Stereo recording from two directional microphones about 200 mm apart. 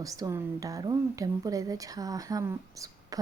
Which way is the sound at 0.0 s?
15° right (ahead or behind).